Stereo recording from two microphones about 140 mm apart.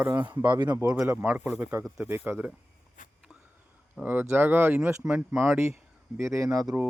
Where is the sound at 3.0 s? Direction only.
70° left (ahead or behind).